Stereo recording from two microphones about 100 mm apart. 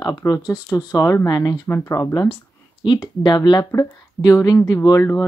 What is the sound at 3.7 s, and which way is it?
Speech, 35° left (ahead or behind).